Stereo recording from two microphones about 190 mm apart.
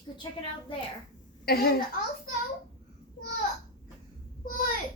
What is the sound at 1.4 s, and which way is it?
Speech, 55° left (ahead or behind).